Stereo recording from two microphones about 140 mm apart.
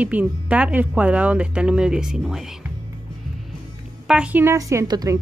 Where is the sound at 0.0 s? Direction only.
10° right (ahead or behind).